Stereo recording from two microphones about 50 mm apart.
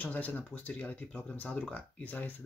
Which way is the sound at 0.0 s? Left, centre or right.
Left.